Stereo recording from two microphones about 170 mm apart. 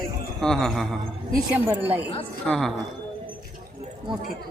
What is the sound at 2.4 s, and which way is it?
Speech, centre (ahead or behind).